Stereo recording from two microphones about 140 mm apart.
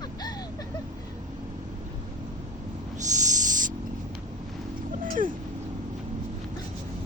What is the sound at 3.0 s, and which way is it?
Owl, 60° right (ahead or behind).